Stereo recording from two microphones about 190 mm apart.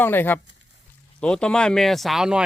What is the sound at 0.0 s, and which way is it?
Speech, 10° left (ahead or behind).